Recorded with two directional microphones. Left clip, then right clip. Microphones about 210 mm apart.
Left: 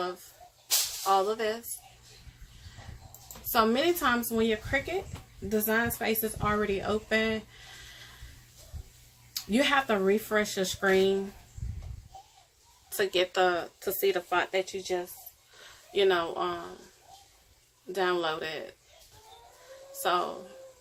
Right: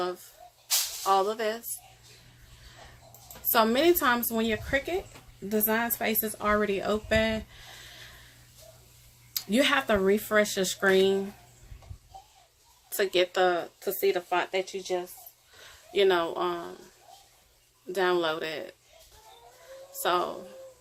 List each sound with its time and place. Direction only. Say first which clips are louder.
0.0 s speech: right 2 dB; 35° right (ahead or behind)
3.5 s speech: right 3 dB; 35° right (ahead or behind)
9.3 s speech: right 1 dB; 35° right (ahead or behind)
13.0 s speech: right 1 dB; 30° right (ahead or behind); by 15.0 s 5° right (ahead or behind)
15.6 s speech: right 2 dB; 30° right (ahead or behind)
17.9 s speech: right 2 dB; 35° right (ahead or behind)
20.0 s speech: right 1 dB; 35° right (ahead or behind)